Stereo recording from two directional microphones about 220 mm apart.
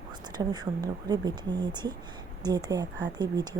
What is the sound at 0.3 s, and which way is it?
Speech, 20° right (ahead or behind).